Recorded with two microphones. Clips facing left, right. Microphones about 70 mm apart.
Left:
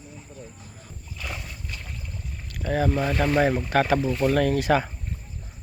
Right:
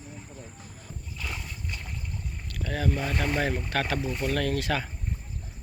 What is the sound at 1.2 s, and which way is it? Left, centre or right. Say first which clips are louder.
Boat: left 2 dB; centre.